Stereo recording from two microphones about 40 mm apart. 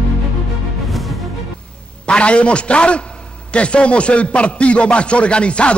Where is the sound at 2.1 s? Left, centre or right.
Left.